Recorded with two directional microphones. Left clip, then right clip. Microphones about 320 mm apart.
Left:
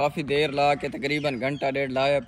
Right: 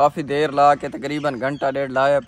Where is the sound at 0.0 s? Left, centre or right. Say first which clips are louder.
Right 6 dB; centre.